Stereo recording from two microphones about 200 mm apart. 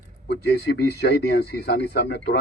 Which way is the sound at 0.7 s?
55° left (ahead or behind).